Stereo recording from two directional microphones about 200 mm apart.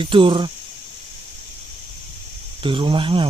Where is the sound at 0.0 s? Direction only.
25° right (ahead or behind).